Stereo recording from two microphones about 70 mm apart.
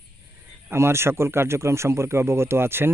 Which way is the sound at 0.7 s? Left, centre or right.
Right.